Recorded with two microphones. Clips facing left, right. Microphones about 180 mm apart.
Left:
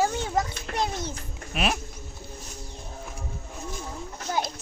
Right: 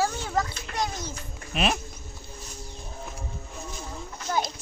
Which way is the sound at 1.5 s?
5° left (ahead or behind).